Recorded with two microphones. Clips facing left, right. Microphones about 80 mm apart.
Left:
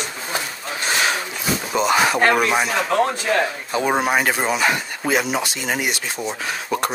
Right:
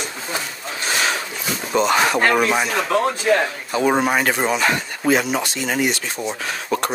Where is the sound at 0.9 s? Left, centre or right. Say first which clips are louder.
Left 1 dB; centre.